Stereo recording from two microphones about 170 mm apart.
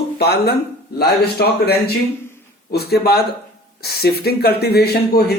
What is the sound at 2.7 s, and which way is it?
Speech, 70° left (ahead or behind).